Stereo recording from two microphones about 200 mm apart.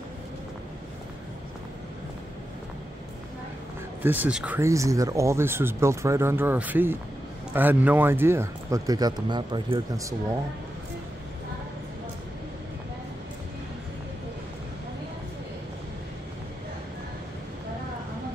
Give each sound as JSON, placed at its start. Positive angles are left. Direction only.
{"t": 4.0, "sound": "speech", "side_deg": -10}